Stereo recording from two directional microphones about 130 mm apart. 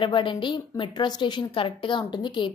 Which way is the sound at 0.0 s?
40° left (ahead or behind).